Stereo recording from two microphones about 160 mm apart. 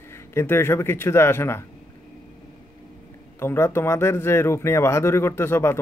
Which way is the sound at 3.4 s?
15° left (ahead or behind).